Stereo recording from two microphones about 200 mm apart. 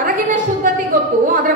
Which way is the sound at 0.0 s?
40° right (ahead or behind).